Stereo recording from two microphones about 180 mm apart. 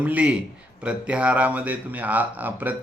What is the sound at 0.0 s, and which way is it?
Speech, 10° right (ahead or behind).